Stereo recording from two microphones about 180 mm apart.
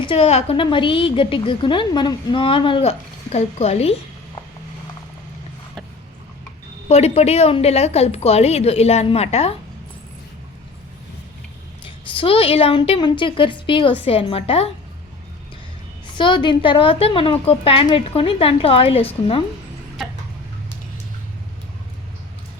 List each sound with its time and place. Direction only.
0.0 s a woman's voice: 30° left (ahead or behind)
6.8 s a woman's voice: 35° left (ahead or behind)
12.1 s a woman's voice: 30° left (ahead or behind)
16.1 s a woman's voice: 25° left (ahead or behind)